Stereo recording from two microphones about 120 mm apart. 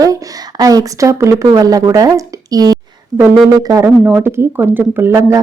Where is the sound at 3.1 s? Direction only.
15° right (ahead or behind).